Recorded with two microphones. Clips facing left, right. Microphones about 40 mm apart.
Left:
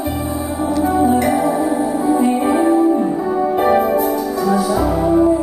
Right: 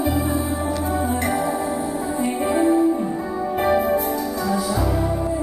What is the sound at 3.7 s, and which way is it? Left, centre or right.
Music, left.